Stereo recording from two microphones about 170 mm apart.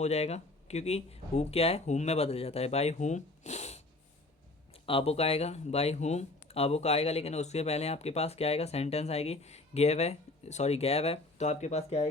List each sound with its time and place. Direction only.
0.0 s speech: 40° left (ahead or behind)